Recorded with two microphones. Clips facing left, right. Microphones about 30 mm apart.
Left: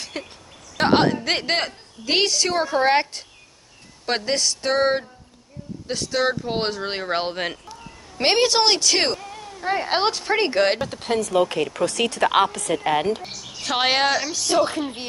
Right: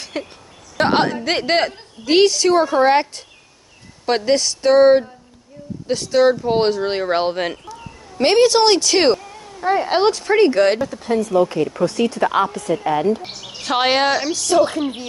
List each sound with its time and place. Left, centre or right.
0.0 s a sound: centre
0.7 s a woman's voice: centre
8.2 s speech: centre
10.9 s speech: left
13.2 s a sound: right
13.6 s speech: centre
14.3 s speech: left